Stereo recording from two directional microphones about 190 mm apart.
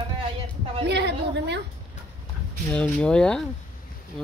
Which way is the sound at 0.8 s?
65° right (ahead or behind).